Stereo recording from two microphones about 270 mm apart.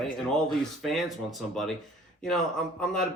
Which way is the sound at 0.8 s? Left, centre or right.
Centre.